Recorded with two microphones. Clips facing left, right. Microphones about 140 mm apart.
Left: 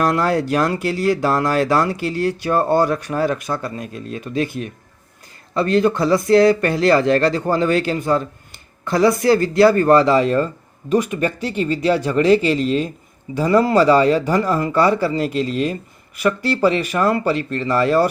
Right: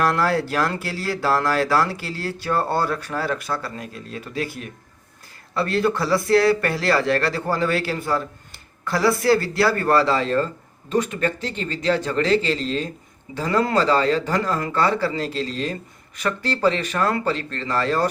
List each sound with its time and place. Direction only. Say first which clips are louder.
0.0 s speech: left 3 dB; 20° left (ahead or behind)